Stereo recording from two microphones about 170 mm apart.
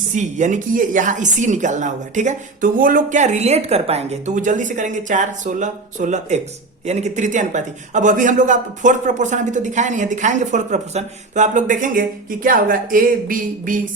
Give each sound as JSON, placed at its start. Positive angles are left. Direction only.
{"t": 0.2, "sound": "a man's voice", "side_deg": -45}